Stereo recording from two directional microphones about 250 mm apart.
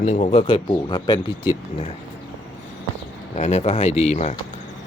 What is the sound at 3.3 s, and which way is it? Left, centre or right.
Speech, left.